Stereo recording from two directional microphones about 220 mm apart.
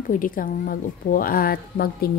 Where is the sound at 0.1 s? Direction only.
40° left (ahead or behind).